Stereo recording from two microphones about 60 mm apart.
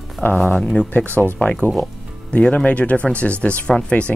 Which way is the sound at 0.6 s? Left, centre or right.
Centre.